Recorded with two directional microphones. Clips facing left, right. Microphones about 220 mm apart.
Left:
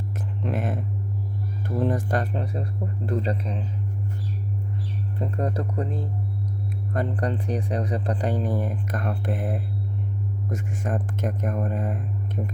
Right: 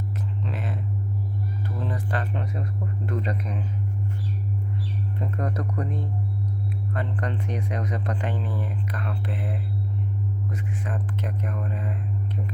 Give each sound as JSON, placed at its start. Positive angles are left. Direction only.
{"t": 0.4, "sound": "speech", "side_deg": 50}
{"t": 5.2, "sound": "speech", "side_deg": 30}
{"t": 6.9, "sound": "speech", "side_deg": 40}